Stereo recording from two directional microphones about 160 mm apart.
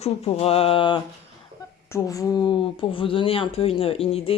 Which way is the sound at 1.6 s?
20° left (ahead or behind).